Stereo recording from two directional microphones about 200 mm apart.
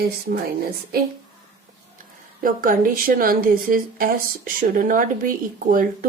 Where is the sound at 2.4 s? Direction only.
45° right (ahead or behind).